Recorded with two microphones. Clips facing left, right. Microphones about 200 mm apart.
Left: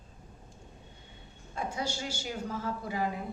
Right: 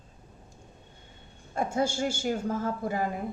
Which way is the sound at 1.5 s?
50° right (ahead or behind).